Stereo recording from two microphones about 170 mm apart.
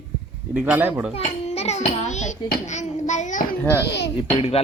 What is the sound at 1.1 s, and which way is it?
A child's voice, 35° left (ahead or behind).